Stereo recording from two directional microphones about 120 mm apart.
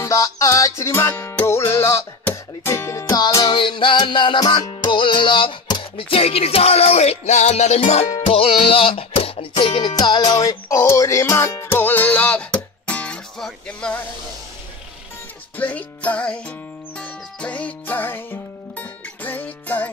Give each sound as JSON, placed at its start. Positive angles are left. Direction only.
{"t": 0.0, "sound": "music", "side_deg": 25}
{"t": 3.5, "sound": "music", "side_deg": 45}
{"t": 15.5, "sound": "music", "side_deg": 10}